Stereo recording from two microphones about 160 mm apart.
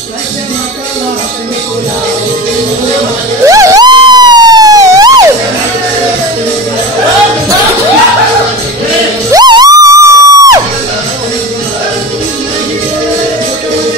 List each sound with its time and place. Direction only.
3.4 s police car: 20° right (ahead or behind)
9.3 s music: 25° right (ahead or behind)